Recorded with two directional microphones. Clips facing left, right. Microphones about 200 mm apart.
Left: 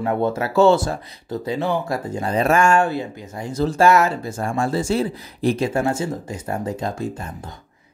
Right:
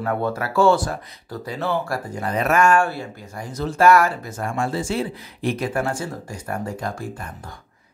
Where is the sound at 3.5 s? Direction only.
30° left (ahead or behind).